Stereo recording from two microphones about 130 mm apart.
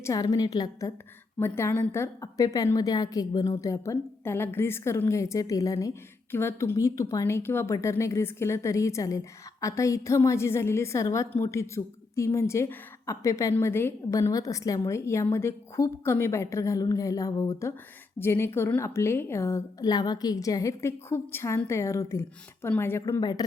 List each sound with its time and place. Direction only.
0.0 s a woman's voice: 25° left (ahead or behind)
1.4 s a woman's voice: 20° left (ahead or behind)